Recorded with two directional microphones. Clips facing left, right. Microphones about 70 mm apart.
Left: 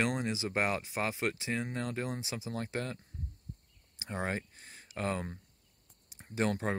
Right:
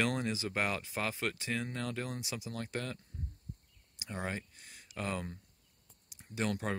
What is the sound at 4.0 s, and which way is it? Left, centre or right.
Speech, left.